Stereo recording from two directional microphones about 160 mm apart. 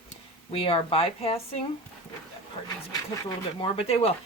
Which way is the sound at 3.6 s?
40° left (ahead or behind).